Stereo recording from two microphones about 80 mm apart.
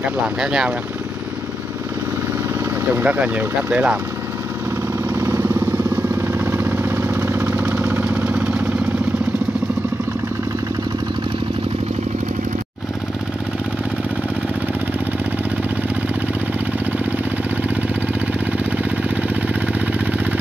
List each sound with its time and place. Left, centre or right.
0.0 s speech: centre
2.9 s speech: right
5.1 s vehicle: right; by 8.6 s centre